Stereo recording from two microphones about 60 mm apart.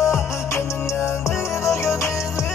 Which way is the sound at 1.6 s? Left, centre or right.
Left.